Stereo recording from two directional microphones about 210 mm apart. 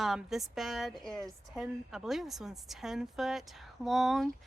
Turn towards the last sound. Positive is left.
turn(degrees=0)  # may be behind; listen again after turning